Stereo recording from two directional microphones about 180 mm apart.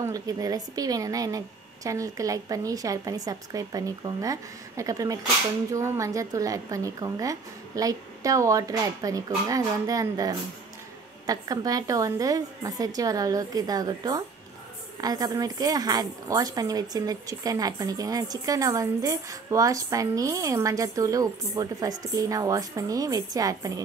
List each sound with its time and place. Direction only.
0.0 s speech: 20° right (ahead or behind)